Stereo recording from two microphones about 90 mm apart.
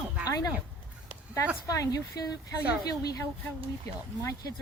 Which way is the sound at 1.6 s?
40° left (ahead or behind).